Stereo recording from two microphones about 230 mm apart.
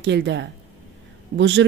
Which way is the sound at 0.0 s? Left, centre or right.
Right.